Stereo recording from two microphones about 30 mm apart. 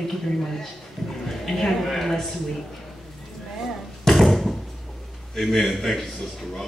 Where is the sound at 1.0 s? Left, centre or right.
Centre.